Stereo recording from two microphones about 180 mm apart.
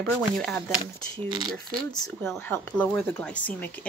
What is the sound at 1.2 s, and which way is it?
Speech, 25° right (ahead or behind).